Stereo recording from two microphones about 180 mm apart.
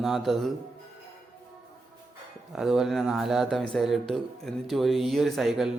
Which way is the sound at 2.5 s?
Centre (ahead or behind).